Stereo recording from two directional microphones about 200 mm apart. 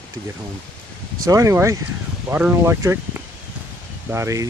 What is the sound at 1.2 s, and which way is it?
Speech, 15° right (ahead or behind).